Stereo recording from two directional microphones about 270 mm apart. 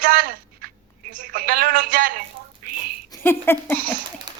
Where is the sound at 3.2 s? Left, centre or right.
Centre.